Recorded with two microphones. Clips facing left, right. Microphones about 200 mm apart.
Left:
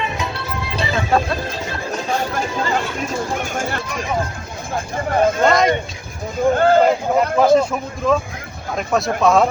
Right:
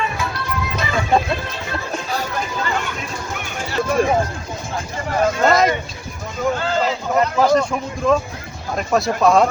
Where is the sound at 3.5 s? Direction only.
50° left (ahead or behind).